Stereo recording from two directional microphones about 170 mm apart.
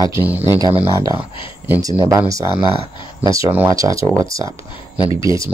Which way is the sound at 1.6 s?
15° right (ahead or behind).